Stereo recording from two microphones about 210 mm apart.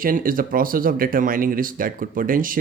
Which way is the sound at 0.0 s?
40° right (ahead or behind).